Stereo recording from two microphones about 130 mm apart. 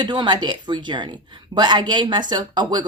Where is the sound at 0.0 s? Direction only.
35° right (ahead or behind).